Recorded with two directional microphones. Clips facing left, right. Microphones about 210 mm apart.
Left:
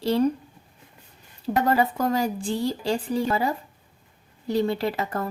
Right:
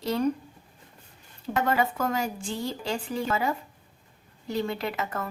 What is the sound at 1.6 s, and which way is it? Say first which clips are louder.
A woman's voice: left 3 dB; 35° left (ahead or behind).